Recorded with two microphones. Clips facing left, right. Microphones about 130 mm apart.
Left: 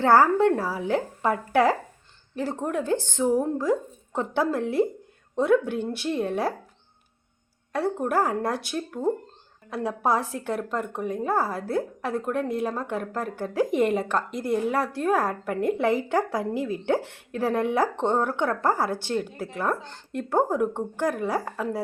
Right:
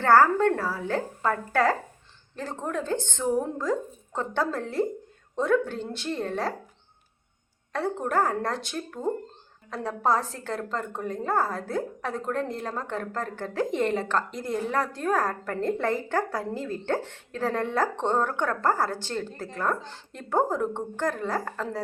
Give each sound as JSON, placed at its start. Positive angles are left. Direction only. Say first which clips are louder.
{"t": 0.0, "sound": "a woman's voice", "louder": "left 1 dB", "side_deg": 15}
{"t": 7.7, "sound": "a woman's voice", "louder": "left 2 dB", "side_deg": 10}